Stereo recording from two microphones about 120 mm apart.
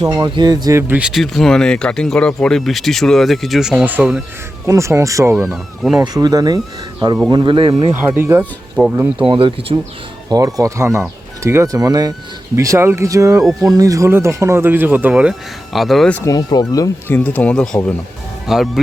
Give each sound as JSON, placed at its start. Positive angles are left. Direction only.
{"t": 0.0, "sound": "speech", "side_deg": -35}
{"t": 0.9, "sound": "speech", "side_deg": -5}
{"t": 4.6, "sound": "speech", "side_deg": -25}
{"t": 5.4, "sound": "speech", "side_deg": 0}
{"t": 6.2, "sound": "speech", "side_deg": -35}
{"t": 8.1, "sound": "speech", "side_deg": -20}
{"t": 9.2, "sound": "speech", "side_deg": -45}
{"t": 10.2, "sound": "speech", "side_deg": -30}
{"t": 13.4, "sound": "speech", "side_deg": 0}
{"t": 13.7, "sound": "speech", "side_deg": -30}
{"t": 16.2, "sound": "speech", "side_deg": 30}
{"t": 17.1, "sound": "speech", "side_deg": 15}